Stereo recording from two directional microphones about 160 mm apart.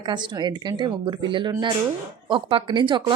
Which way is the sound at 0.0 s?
25° right (ahead or behind).